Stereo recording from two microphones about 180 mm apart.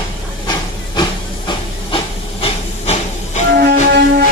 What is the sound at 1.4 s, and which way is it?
Hiss, 30° left (ahead or behind).